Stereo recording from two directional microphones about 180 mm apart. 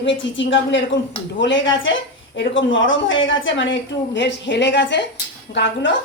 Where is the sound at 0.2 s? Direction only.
90° left.